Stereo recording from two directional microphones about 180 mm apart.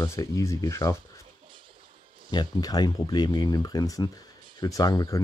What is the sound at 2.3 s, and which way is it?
Speech, 20° left (ahead or behind).